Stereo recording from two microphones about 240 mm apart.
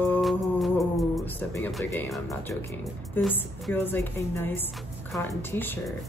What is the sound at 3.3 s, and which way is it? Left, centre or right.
Speech, centre.